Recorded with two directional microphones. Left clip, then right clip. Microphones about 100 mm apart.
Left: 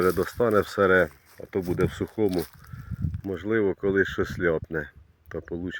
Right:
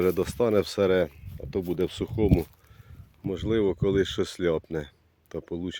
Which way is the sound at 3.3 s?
20° right (ahead or behind).